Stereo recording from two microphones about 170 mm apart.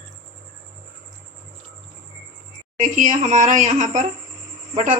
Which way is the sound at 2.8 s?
50° right (ahead or behind).